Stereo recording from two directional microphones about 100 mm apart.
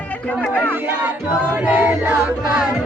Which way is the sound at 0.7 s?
20° right (ahead or behind).